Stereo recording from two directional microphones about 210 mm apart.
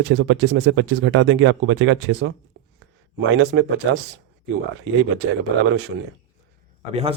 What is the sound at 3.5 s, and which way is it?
Speech, 60° right (ahead or behind).